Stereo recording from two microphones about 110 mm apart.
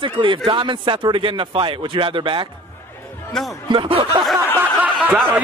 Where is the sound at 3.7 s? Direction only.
50° right (ahead or behind).